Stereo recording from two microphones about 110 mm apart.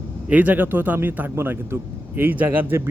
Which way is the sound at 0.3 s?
15° right (ahead or behind).